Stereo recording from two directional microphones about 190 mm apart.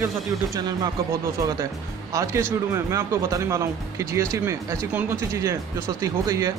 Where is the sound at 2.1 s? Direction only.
15° right (ahead or behind).